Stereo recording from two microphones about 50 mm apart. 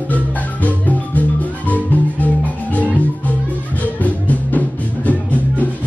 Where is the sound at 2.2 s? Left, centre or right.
Left.